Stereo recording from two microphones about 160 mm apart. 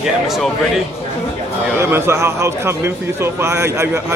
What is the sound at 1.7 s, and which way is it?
A man's voice, 15° right (ahead or behind).